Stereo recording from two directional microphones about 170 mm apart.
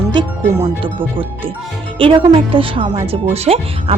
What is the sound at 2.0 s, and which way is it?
Speech, 30° right (ahead or behind).